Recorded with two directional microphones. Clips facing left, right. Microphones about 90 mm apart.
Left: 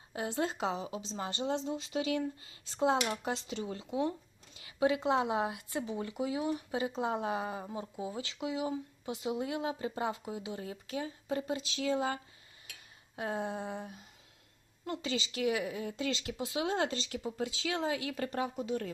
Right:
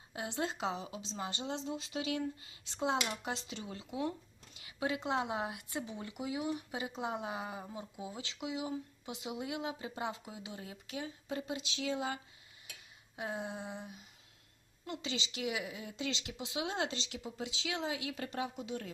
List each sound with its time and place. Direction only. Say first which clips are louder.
0.1 s speech: left 4 dB; 35° left (ahead or behind)